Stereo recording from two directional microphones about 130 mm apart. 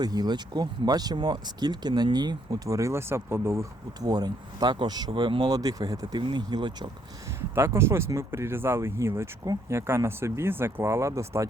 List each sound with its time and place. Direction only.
0.0 s speech: 30° right (ahead or behind)
7.5 s speech: 20° right (ahead or behind)